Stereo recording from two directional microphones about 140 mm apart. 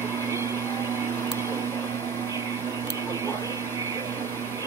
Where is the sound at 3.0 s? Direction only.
20° right (ahead or behind).